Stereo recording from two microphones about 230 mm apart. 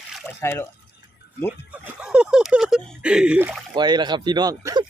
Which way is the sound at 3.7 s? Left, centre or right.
Centre.